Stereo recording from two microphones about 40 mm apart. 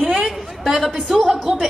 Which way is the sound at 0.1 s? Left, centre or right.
Centre.